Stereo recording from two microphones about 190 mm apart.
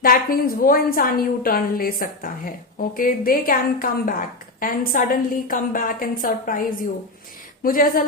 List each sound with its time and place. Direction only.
0.0 s a woman's voice: 50° left (ahead or behind)